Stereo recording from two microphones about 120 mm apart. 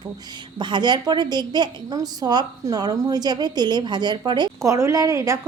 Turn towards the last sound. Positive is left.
turn(degrees=-25)  # may be behind; listen again after turning